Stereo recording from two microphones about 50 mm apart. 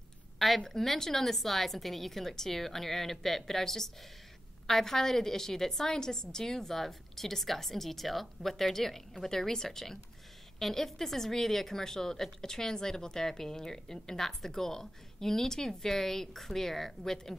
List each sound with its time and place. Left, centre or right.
0.7 s a woman's voice: centre